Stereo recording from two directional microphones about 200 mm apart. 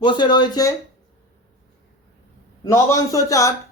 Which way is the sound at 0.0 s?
20° left (ahead or behind).